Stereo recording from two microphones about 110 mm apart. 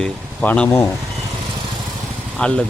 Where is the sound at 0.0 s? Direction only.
10° left (ahead or behind).